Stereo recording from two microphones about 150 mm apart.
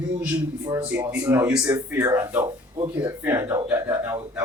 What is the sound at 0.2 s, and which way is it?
Speech, 10° right (ahead or behind).